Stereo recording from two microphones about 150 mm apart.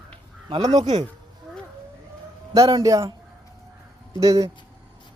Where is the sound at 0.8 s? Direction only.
50° right (ahead or behind).